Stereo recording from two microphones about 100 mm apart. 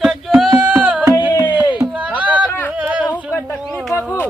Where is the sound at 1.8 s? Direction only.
10° right (ahead or behind).